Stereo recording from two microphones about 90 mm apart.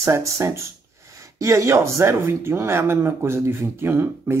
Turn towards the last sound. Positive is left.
turn(degrees=-25)  # may be behind; listen again after turning